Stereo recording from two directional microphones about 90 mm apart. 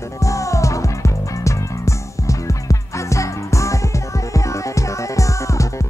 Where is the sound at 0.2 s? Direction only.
35° left (ahead or behind).